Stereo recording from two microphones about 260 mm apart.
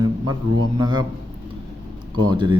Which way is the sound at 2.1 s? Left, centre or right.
Centre.